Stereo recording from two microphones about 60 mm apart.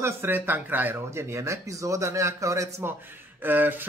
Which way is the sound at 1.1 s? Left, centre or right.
Right.